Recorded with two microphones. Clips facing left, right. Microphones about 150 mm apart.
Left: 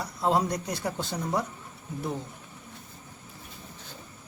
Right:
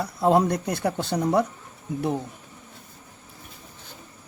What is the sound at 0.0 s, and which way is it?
Speech, 55° right (ahead or behind).